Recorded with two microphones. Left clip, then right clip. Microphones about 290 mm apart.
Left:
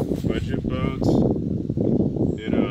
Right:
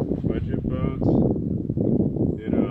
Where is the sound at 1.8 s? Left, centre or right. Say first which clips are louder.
Left 1 dB; right.